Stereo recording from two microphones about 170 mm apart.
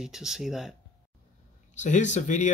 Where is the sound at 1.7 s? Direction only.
45° left (ahead or behind).